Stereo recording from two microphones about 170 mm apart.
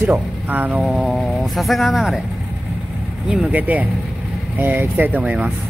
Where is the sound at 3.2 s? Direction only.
5° right (ahead or behind).